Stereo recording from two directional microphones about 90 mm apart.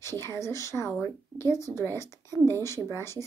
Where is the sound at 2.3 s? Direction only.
45° right (ahead or behind).